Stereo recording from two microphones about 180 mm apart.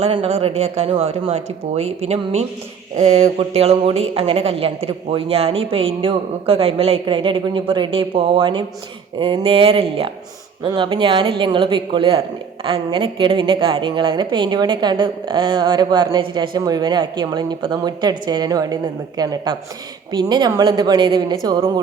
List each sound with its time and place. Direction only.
0.0 s a woman's voice: 35° right (ahead or behind)